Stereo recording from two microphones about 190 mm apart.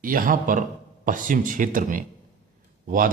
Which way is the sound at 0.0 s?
45° right (ahead or behind).